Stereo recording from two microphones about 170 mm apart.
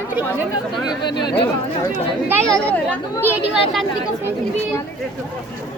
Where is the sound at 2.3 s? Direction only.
15° right (ahead or behind).